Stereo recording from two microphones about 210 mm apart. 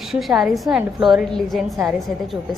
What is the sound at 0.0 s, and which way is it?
A woman's voice, centre (ahead or behind).